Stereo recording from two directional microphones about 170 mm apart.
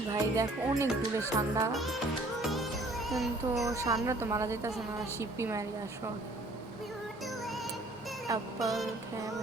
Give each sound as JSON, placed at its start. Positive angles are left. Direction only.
{"t": 0.1, "sound": "speech", "side_deg": -20}
{"t": 1.7, "sound": "music", "side_deg": 0}
{"t": 3.7, "sound": "speech", "side_deg": -20}
{"t": 8.3, "sound": "child singing", "side_deg": -20}